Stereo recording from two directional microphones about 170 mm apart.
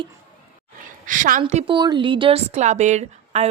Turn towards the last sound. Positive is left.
turn(degrees=-40)  # may be behind; listen again after turning